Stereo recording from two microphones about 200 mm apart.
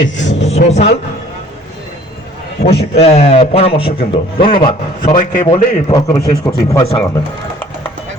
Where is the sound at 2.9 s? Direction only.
30° left (ahead or behind).